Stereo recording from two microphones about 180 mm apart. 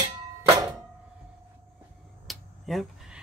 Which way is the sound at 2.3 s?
Centre (ahead or behind).